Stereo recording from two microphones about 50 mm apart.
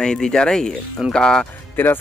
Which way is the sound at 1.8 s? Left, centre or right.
Left.